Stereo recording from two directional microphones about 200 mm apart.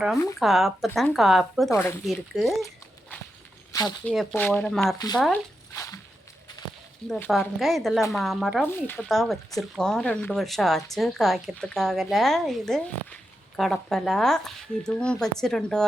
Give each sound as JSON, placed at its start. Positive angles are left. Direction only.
{"t": 0.3, "sound": "speech", "side_deg": 0}
{"t": 1.7, "sound": "speech", "side_deg": 15}
{"t": 2.0, "sound": "speech", "side_deg": 0}
{"t": 3.7, "sound": "speech", "side_deg": 15}
{"t": 4.1, "sound": "speech", "side_deg": 0}
{"t": 4.9, "sound": "speech", "side_deg": 20}
{"t": 5.7, "sound": "a sound", "side_deg": 15}
{"t": 7.1, "sound": "speech", "side_deg": 0}